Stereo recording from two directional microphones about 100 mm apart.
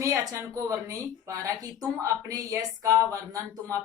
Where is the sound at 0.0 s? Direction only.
35° right (ahead or behind).